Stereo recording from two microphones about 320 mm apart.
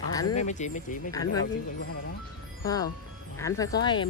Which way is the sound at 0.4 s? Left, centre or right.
Left.